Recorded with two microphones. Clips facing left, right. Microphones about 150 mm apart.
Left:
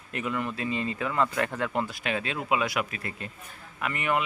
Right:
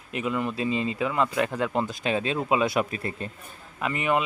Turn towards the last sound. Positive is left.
turn(degrees=-20)  # may be behind; listen again after turning